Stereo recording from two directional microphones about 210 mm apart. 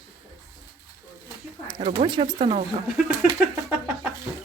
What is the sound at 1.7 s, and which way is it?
Speech, 20° right (ahead or behind).